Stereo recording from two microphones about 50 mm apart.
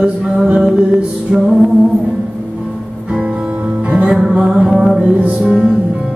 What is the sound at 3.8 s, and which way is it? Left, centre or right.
Music, right.